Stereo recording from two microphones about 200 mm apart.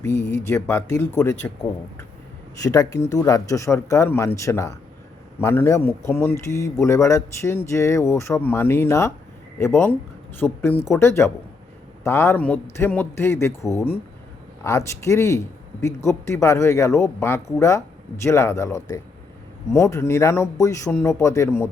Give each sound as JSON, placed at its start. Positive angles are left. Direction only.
{"t": 0.2, "sound": "speech", "side_deg": 15}
{"t": 2.6, "sound": "speech", "side_deg": 15}